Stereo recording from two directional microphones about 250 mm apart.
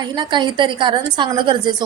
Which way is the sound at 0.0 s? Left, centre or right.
Centre.